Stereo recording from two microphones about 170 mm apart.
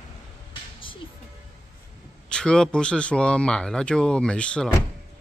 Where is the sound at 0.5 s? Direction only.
30° left (ahead or behind).